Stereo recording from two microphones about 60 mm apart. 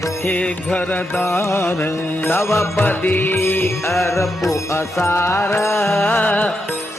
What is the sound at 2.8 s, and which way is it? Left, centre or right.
Music, left.